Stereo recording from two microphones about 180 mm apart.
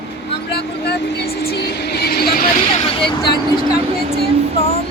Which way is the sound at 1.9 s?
60° left (ahead or behind).